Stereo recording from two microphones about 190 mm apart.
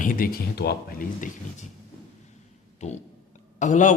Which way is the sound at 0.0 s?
45° left (ahead or behind).